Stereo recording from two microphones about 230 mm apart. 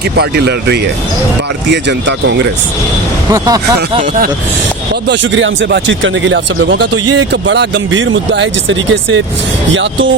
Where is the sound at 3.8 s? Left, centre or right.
Right.